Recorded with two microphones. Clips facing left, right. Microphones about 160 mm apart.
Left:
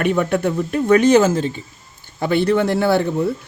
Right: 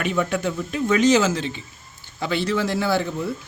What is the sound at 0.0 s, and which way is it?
Speech, 55° left (ahead or behind).